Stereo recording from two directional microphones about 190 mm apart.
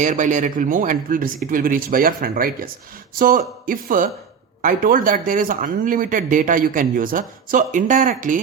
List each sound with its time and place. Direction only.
0.0 s speech: 40° right (ahead or behind)